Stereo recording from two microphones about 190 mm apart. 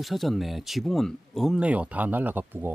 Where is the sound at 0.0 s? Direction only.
Centre (ahead or behind).